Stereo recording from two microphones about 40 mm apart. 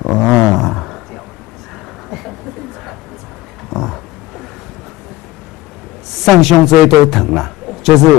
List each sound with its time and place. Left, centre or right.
0.0 s roaring cats: centre
2.0 s bird: centre
3.7 s dog: centre
6.0 s a man's voice: centre